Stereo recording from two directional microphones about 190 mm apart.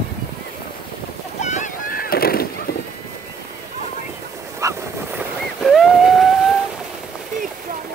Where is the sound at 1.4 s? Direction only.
40° left (ahead or behind).